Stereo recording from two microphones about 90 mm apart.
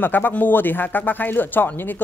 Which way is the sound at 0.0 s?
20° left (ahead or behind).